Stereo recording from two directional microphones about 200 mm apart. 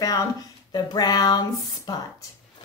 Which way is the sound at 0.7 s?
20° left (ahead or behind).